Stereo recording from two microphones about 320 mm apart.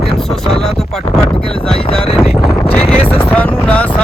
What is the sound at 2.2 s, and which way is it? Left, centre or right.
Speech, centre.